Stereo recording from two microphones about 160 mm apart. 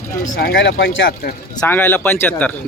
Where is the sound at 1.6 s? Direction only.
10° left (ahead or behind).